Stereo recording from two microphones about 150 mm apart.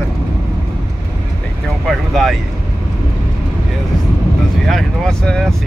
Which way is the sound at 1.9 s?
Centre (ahead or behind).